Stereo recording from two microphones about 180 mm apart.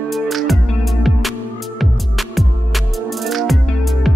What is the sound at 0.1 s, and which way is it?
Music, centre (ahead or behind).